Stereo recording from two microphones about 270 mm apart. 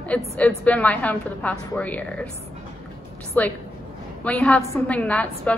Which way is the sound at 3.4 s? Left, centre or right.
Centre.